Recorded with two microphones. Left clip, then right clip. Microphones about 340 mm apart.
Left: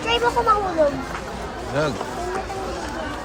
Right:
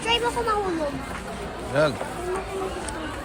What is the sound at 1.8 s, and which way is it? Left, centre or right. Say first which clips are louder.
Speech: right 2 dB; centre.